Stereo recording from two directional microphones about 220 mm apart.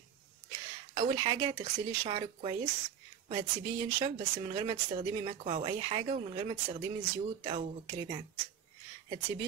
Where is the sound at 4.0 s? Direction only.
25° right (ahead or behind).